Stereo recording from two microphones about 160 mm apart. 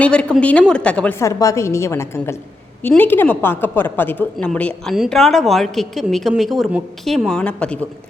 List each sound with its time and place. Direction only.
0.0 s a woman's voice: 5° left (ahead or behind)
1.2 s a woman's voice: 20° left (ahead or behind)